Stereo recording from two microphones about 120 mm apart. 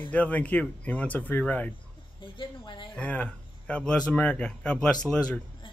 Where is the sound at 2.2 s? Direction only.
40° left (ahead or behind).